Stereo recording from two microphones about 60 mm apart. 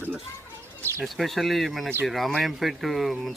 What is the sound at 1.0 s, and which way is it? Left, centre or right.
Speech, centre.